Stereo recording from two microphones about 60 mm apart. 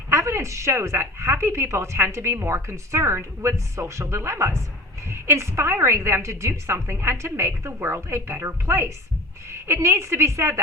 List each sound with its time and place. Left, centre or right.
0.1 s a woman's voice: right